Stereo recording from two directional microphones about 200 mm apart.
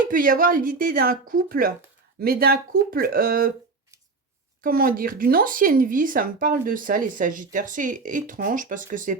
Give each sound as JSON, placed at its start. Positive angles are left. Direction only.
{"t": 0.1, "sound": "speech", "side_deg": -45}
{"t": 4.6, "sound": "speech", "side_deg": -45}